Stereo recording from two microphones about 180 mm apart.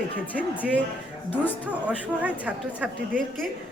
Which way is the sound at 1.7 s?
10° right (ahead or behind).